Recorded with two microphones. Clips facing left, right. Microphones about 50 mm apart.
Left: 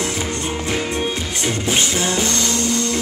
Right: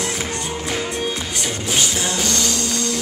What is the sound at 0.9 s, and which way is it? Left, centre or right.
Music, left.